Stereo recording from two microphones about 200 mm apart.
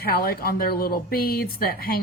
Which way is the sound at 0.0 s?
50° left (ahead or behind).